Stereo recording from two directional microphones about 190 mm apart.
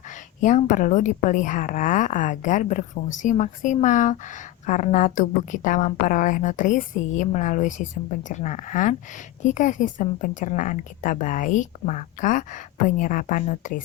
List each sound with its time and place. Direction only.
0.4 s a woman's voice: 40° left (ahead or behind)